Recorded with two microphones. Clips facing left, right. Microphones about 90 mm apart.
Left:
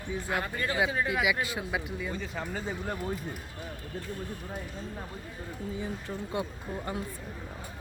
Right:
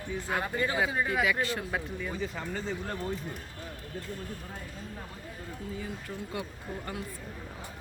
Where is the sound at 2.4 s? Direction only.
10° left (ahead or behind).